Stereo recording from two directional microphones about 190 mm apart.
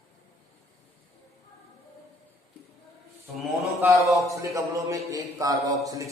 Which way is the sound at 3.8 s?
15° right (ahead or behind).